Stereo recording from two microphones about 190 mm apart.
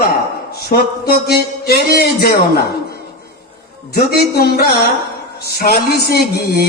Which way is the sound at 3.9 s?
55° left (ahead or behind).